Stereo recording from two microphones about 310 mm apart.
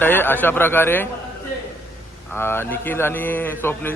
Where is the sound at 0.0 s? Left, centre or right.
Centre.